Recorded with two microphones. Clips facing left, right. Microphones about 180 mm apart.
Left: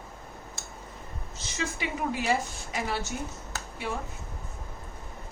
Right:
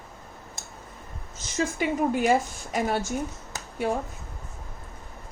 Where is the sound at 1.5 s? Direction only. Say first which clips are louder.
Right 7 dB; 50° right (ahead or behind).